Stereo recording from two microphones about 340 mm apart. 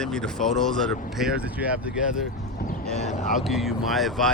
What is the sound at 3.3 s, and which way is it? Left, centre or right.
Speech, centre.